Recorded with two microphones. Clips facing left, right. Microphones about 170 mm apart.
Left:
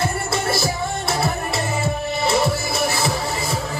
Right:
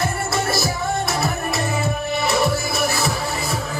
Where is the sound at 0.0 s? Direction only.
30° left (ahead or behind).